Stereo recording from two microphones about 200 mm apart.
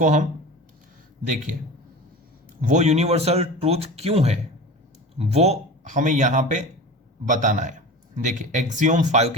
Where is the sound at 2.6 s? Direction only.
35° right (ahead or behind).